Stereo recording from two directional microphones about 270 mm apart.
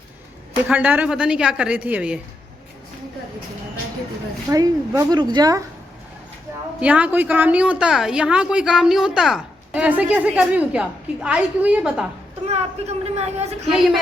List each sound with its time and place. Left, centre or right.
0.7 s a woman's voice: centre
4.4 s speech: centre
6.7 s a woman's voice: centre
12.5 s a man's voice: right